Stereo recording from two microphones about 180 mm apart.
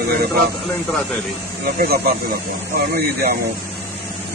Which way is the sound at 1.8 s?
55° right (ahead or behind).